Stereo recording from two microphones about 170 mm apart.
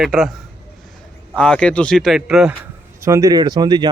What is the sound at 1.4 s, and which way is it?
Speech, 5° left (ahead or behind).